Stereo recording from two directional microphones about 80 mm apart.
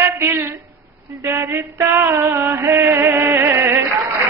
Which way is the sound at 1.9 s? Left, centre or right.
Right.